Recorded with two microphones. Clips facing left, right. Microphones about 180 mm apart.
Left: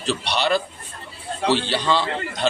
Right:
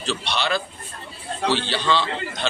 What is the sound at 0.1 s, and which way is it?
Speech, 40° left (ahead or behind).